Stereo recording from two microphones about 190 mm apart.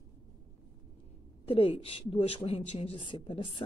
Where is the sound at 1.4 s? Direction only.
30° left (ahead or behind).